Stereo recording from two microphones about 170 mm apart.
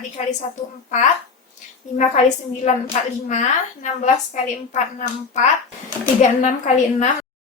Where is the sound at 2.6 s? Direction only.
45° left (ahead or behind).